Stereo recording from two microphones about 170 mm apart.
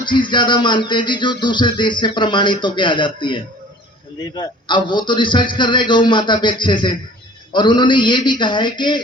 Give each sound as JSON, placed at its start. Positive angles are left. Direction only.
{"t": 0.0, "sound": "speech", "side_deg": 25}